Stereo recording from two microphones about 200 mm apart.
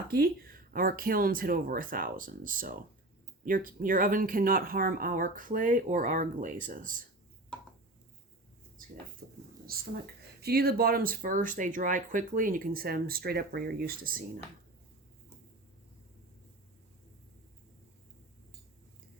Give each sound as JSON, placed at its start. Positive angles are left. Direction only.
{"t": 0.1, "sound": "speech", "side_deg": -45}
{"t": 9.2, "sound": "a sound", "side_deg": -45}
{"t": 9.7, "sound": "speech", "side_deg": -50}